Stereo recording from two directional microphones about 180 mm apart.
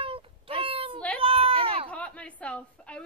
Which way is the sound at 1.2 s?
30° right (ahead or behind).